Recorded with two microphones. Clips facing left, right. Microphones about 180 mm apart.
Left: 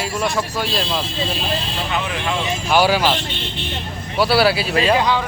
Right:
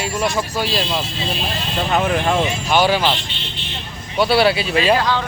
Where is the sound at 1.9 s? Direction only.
45° right (ahead or behind).